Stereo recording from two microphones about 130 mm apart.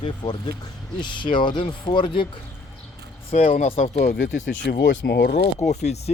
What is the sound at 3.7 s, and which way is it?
Speech, 55° left (ahead or behind).